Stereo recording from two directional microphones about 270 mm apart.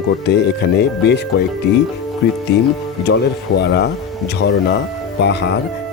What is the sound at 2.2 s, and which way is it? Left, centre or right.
Speech, left.